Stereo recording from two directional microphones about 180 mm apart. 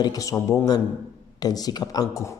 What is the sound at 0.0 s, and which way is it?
Mantra, 20° left (ahead or behind).